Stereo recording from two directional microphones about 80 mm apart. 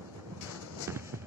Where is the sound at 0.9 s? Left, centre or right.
Right.